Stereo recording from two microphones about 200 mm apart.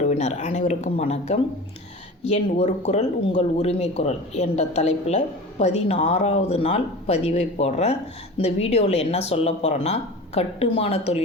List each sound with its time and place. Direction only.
0.0 s speech: 35° left (ahead or behind)